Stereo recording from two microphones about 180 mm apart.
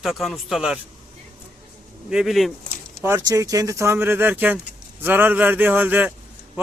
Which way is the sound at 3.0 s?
15° right (ahead or behind).